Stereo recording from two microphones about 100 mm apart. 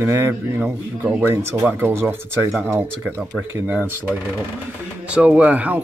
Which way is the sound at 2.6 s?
15° right (ahead or behind).